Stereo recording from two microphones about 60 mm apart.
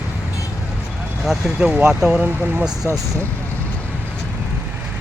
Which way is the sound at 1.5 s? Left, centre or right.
Centre.